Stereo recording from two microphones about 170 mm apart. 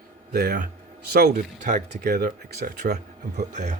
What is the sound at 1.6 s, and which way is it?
Speech, 55° right (ahead or behind).